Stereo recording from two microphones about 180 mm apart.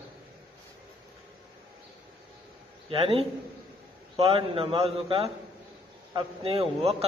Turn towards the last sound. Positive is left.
turn(degrees=-35)  # may be behind; listen again after turning